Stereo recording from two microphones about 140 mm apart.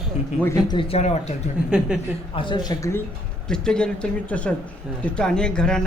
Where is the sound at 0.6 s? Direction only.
35° left (ahead or behind).